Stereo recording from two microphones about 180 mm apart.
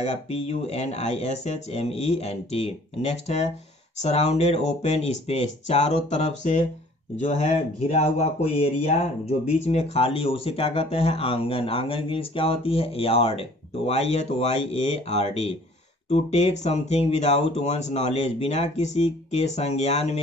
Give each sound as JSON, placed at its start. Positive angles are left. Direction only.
{"t": 0.0, "sound": "speech", "side_deg": 35}